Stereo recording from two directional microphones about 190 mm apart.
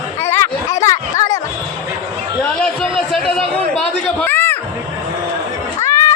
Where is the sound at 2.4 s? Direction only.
5° left (ahead or behind).